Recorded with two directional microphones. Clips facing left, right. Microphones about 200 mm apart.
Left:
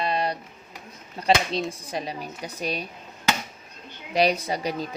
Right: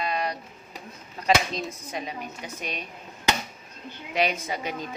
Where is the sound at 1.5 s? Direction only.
35° left (ahead or behind).